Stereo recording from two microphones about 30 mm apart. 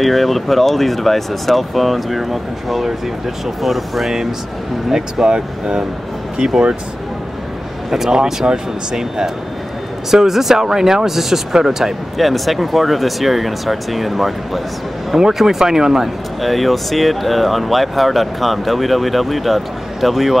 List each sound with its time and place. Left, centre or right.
0.0 s speech: centre
4.9 s speech: right
7.9 s speech: centre
15.1 s speech: centre
16.3 s speech: centre